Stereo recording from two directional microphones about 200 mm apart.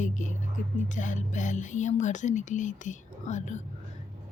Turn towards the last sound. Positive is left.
turn(degrees=35)  # may be behind; listen again after turning